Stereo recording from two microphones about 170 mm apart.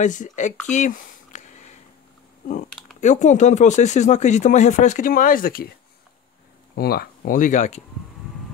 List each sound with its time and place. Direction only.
0.0 s speech: 45° left (ahead or behind)
0.7 s a sound: 45° left (ahead or behind)
3.0 s speech: 45° left (ahead or behind)
6.7 s speech: 65° left (ahead or behind); by 7.8 s 45° left (ahead or behind)